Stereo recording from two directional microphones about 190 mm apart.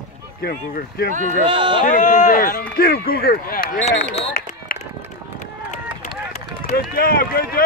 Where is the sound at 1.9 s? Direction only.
40° left (ahead or behind).